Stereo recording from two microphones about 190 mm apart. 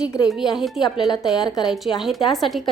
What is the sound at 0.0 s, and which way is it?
Speech, 5° right (ahead or behind).